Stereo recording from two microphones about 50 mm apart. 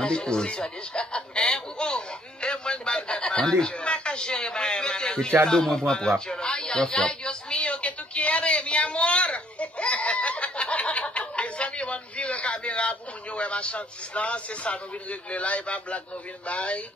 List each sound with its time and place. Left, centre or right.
0.0 s chuckle: centre
5.5 s a sound: centre
16.4 s a man's voice: left